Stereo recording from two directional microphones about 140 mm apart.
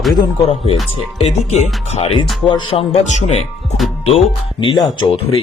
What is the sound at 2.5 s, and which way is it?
Speech, 35° left (ahead or behind).